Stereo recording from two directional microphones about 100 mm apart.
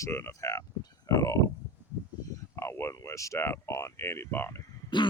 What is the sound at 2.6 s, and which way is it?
Speech, 25° left (ahead or behind).